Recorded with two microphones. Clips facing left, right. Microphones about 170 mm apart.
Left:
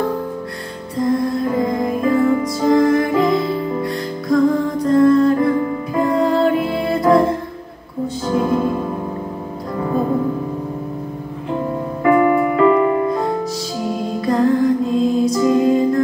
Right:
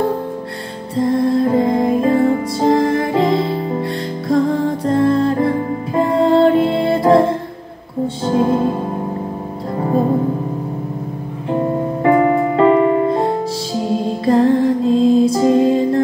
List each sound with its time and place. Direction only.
1.1 s music: 30° right (ahead or behind)
12.0 s music: 30° right (ahead or behind)